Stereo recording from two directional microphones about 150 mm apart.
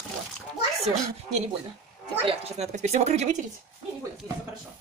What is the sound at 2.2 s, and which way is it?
Speech, 45° right (ahead or behind).